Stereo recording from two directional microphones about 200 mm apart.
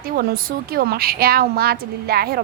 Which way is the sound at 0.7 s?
50° right (ahead or behind).